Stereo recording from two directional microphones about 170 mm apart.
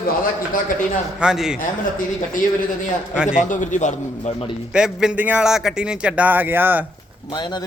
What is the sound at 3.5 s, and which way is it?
Speech, 45° left (ahead or behind).